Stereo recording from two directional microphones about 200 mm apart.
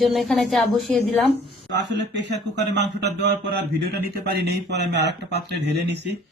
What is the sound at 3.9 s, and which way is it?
Speech, 55° right (ahead or behind).